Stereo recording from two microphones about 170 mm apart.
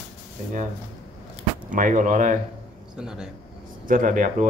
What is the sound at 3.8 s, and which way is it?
Speech, 50° right (ahead or behind).